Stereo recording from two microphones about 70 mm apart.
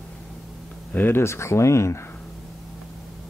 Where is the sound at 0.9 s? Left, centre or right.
Left.